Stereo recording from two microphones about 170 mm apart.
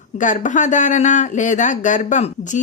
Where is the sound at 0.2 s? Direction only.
50° left (ahead or behind).